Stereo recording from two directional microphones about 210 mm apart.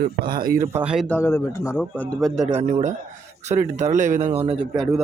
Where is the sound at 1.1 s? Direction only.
10° left (ahead or behind).